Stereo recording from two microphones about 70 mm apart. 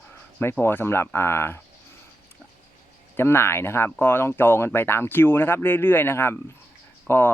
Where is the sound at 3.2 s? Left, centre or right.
Left.